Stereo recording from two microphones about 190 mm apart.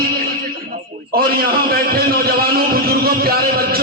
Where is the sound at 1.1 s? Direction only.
50° right (ahead or behind).